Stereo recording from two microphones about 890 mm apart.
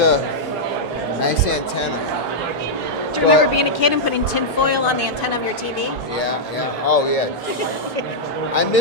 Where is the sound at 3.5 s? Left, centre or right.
Left.